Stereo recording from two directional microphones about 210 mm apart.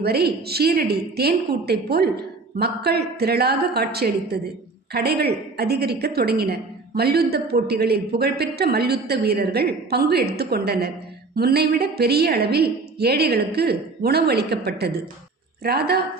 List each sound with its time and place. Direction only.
0.0 s a woman's voice: 50° right (ahead or behind)